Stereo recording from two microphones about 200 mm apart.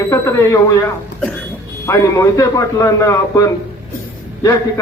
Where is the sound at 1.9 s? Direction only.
15° left (ahead or behind).